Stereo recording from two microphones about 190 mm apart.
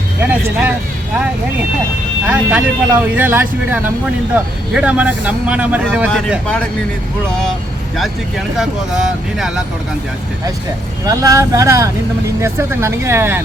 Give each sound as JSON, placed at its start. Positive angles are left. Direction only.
{"t": 0.2, "sound": "speech", "side_deg": -10}
{"t": 2.2, "sound": "speech", "side_deg": -10}
{"t": 7.9, "sound": "speech", "side_deg": 0}
{"t": 11.0, "sound": "speech", "side_deg": -20}